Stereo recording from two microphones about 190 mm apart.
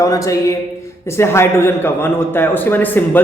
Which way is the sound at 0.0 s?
15° left (ahead or behind).